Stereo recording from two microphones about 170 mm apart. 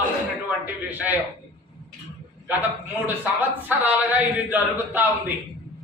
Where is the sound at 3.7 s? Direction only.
10° right (ahead or behind).